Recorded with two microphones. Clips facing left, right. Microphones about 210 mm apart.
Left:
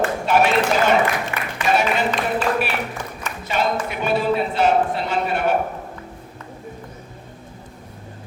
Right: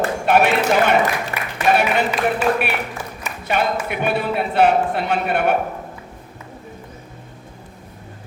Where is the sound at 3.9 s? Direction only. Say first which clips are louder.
Left 1 dB; 60° right (ahead or behind).